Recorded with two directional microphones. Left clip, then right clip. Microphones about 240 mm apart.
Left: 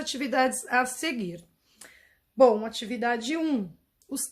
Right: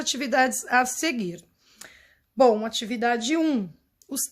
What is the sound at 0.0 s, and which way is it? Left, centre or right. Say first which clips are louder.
A woman's voice: right 3 dB; right.